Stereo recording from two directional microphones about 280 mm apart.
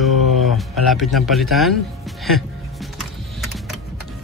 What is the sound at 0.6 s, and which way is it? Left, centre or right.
Speech, centre.